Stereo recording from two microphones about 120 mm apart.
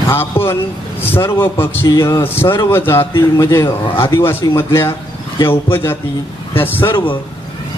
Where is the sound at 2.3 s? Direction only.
20° left (ahead or behind).